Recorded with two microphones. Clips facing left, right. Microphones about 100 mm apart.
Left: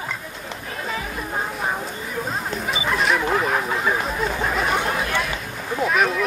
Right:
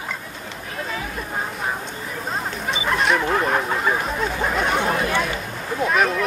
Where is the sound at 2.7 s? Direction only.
Centre (ahead or behind).